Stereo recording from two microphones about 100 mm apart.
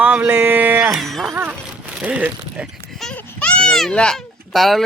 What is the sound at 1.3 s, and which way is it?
Speech, 25° right (ahead or behind).